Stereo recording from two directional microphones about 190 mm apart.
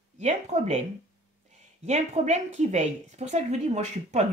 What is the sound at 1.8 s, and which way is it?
Speech, 35° right (ahead or behind).